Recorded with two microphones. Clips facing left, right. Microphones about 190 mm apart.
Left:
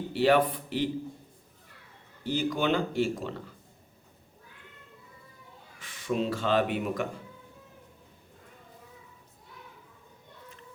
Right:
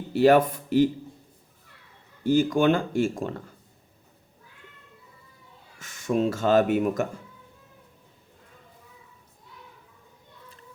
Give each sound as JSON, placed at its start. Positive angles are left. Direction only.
{"t": 0.1, "sound": "speech", "side_deg": -45}
{"t": 2.2, "sound": "speech", "side_deg": -50}
{"t": 5.8, "sound": "speech", "side_deg": -45}